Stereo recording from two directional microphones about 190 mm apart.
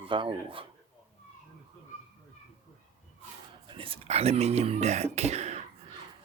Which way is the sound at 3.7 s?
30° right (ahead or behind).